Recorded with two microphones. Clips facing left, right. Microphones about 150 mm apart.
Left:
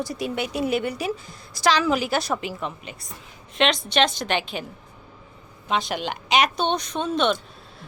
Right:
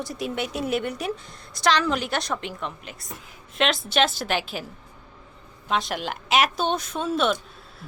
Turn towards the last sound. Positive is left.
turn(degrees=-5)  # may be behind; listen again after turning